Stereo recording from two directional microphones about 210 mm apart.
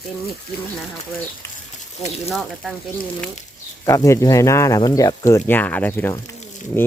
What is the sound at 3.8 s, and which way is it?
Speech, 15° left (ahead or behind).